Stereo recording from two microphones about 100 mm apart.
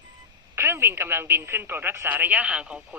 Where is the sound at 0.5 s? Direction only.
25° right (ahead or behind).